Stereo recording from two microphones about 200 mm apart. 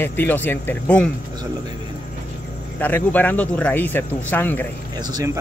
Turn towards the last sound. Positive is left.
turn(degrees=-20)  # may be behind; listen again after turning